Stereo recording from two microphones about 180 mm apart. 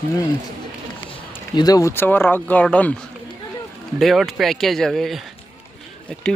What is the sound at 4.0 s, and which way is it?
Speech, centre (ahead or behind).